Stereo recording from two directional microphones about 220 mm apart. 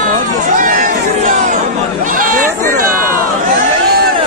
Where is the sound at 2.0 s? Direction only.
40° right (ahead or behind).